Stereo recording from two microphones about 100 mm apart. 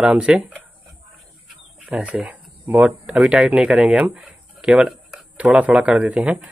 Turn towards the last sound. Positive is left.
turn(degrees=-10)  # may be behind; listen again after turning